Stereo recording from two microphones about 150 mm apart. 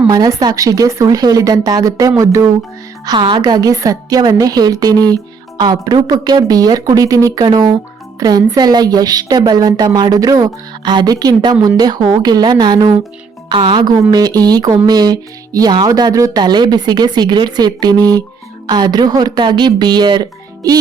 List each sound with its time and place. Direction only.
0.1 s a woman's voice: 25° right (ahead or behind)